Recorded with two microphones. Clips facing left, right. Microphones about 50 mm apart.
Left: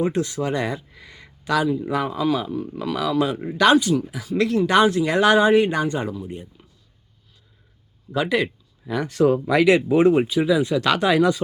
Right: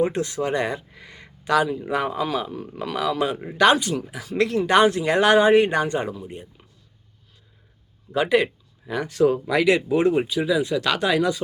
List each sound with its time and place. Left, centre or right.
0.0 s a man's voice: right
6.0 s a man's voice: right
8.1 s a man's voice: right
8.9 s speech: centre